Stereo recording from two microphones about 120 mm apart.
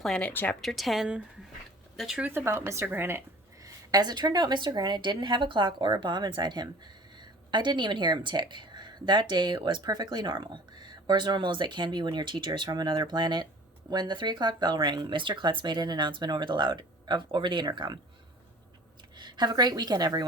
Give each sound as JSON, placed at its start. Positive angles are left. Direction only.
{"t": 0.0, "sound": "speech", "side_deg": 5}
{"t": 0.6, "sound": "speech", "side_deg": 0}
{"t": 2.2, "sound": "speech", "side_deg": -20}
{"t": 3.6, "sound": "a woman's voice", "side_deg": -35}
{"t": 19.1, "sound": "a woman's voice", "side_deg": -40}